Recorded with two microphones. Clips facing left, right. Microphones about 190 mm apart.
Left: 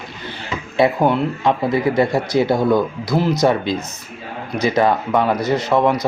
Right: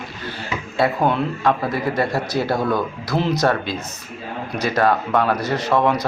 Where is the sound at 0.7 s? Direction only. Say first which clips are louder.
Left 4 dB; 15° left (ahead or behind).